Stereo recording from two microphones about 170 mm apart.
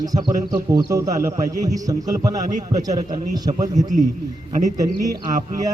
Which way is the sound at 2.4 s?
50° right (ahead or behind).